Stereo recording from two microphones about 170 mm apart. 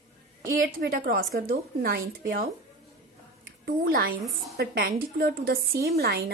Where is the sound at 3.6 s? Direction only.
60° right (ahead or behind).